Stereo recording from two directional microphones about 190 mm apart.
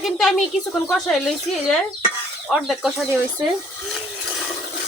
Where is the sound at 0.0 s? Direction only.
Centre (ahead or behind).